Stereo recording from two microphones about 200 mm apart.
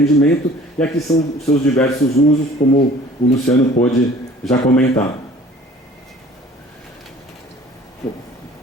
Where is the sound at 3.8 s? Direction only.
40° left (ahead or behind).